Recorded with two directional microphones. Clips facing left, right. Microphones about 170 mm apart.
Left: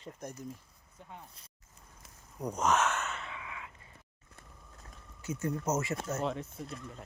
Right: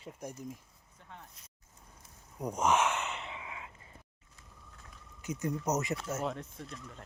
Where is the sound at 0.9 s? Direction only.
10° left (ahead or behind).